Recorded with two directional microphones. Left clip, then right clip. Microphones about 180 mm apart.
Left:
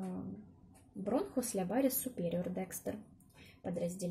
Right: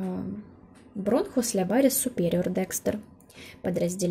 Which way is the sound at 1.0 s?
35° right (ahead or behind).